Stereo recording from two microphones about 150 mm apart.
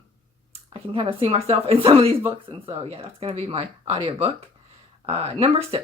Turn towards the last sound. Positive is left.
turn(degrees=-40)  # may be behind; listen again after turning